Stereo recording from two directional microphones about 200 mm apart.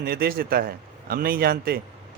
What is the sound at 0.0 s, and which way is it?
A man's voice, 50° right (ahead or behind).